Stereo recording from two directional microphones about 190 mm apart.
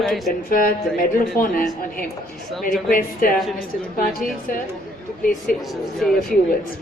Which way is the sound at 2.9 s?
50° left (ahead or behind).